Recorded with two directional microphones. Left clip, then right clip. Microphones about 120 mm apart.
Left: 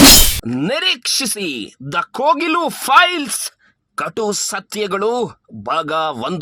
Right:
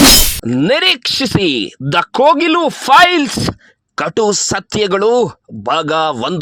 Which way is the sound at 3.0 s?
50° right (ahead or behind).